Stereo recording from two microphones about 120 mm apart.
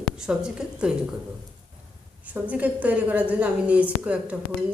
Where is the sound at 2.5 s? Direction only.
10° right (ahead or behind).